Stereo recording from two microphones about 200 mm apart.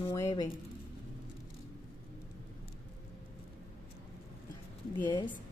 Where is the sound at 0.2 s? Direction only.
20° left (ahead or behind).